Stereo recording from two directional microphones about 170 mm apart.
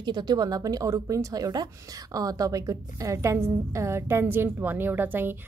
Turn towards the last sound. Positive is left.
turn(degrees=-10)  # may be behind; listen again after turning